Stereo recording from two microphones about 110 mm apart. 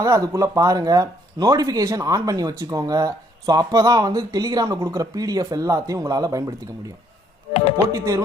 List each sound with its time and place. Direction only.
0.0 s speech: 30° right (ahead or behind)
7.9 s chopping: 30° right (ahead or behind)